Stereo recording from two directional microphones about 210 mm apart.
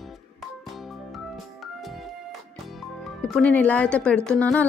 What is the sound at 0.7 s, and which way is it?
Music, centre (ahead or behind).